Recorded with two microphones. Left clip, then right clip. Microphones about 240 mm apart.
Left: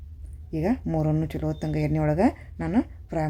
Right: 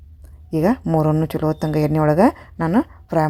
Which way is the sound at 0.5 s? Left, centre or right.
Right.